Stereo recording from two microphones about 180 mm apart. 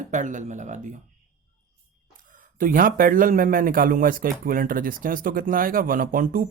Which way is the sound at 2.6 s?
50° right (ahead or behind).